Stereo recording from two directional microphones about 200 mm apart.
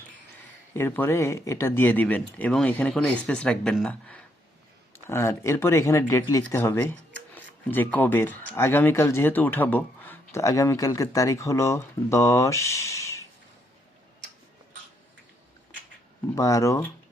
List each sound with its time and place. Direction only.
0.8 s speech: 10° left (ahead or behind)
16.3 s speech: 15° left (ahead or behind)